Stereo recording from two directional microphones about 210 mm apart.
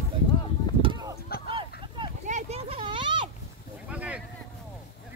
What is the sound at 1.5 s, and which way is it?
Vehicle, 25° right (ahead or behind).